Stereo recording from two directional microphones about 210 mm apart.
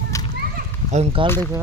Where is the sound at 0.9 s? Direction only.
25° right (ahead or behind).